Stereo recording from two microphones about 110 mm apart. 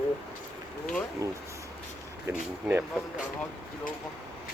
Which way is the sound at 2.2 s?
20° right (ahead or behind).